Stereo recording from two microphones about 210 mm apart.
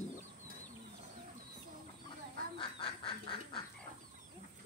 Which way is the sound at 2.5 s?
25° left (ahead or behind).